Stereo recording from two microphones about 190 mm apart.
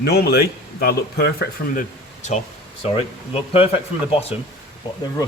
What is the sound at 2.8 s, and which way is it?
Speech, 35° left (ahead or behind).